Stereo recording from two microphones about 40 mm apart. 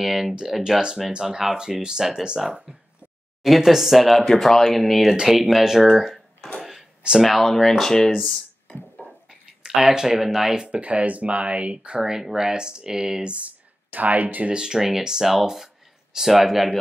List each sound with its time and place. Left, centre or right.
0.0 s speech: centre
3.4 s speech: centre
5.9 s a sound: centre
7.2 s speech: centre
8.1 s speech: centre
8.9 s a sound: centre
9.8 s speech: centre
10.5 s speech: right
10.8 s speech: right
12.0 s speech: centre
13.2 s speech: right
13.5 s speech: right
14.5 s speech: centre